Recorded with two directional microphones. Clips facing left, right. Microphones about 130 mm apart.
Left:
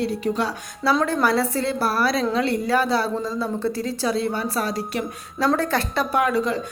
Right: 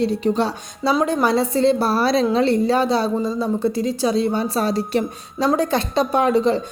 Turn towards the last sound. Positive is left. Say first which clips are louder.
# right 4 dB
turn(degrees=-25)  # may be behind; listen again after turning